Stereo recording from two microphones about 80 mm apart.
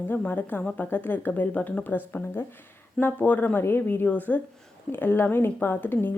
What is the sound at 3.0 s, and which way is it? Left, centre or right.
Speech, left.